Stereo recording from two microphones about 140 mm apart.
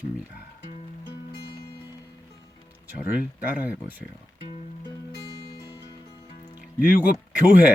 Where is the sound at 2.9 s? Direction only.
10° right (ahead or behind).